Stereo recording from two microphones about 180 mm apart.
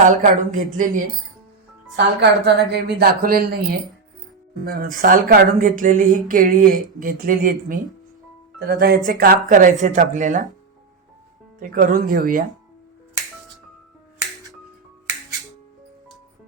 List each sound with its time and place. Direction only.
0.0 s speech: 45° right (ahead or behind)
2.0 s a woman's voice: 70° right (ahead or behind); by 10.5 s 45° right (ahead or behind)
11.6 s speech: 50° right (ahead or behind)